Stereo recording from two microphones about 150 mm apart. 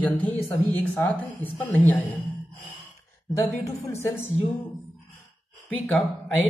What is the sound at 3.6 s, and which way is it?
Speech, 20° left (ahead or behind).